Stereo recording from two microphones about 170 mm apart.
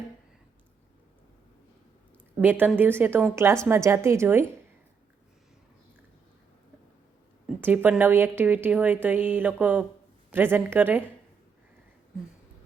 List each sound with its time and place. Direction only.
2.4 s a woman's voice: 10° right (ahead or behind)
7.4 s a woman's voice: 10° right (ahead or behind)